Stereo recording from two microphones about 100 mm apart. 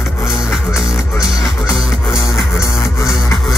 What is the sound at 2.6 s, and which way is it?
Music, 30° left (ahead or behind).